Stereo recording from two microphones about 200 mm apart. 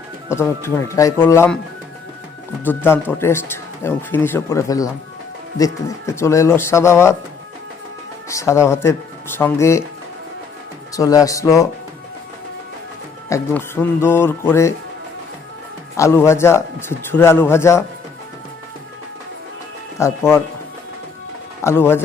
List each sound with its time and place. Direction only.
0.3 s a man's voice: 15° left (ahead or behind)
2.6 s a man's voice: 10° left (ahead or behind)
8.3 s a man's voice: 15° left (ahead or behind)
10.9 s a man's voice: 15° left (ahead or behind)
13.3 s a man's voice: 10° left (ahead or behind)
16.0 s a man's voice: 15° left (ahead or behind)
20.0 s a man's voice: 15° left (ahead or behind)
21.6 s speech: 10° left (ahead or behind)